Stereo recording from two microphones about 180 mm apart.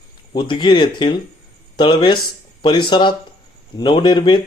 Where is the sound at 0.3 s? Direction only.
25° left (ahead or behind).